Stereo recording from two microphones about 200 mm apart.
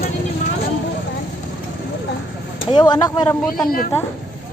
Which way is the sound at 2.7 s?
20° left (ahead or behind).